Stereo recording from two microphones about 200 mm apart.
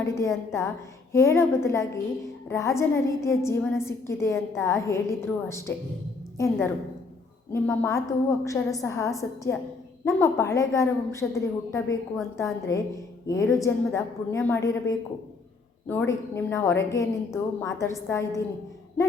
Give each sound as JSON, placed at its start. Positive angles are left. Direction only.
{"t": 0.2, "sound": "a woman's voice", "side_deg": 15}